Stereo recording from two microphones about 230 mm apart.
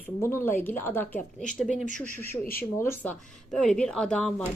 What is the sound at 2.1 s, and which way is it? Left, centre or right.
Speech, centre.